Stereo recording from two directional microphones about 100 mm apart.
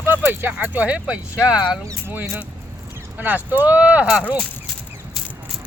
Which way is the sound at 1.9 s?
25° right (ahead or behind).